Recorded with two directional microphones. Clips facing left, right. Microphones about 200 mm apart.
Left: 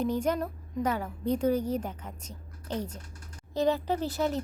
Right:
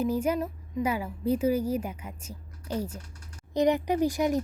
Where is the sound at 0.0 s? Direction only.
10° right (ahead or behind).